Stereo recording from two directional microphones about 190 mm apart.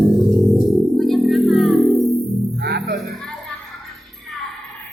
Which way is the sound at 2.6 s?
60° right (ahead or behind).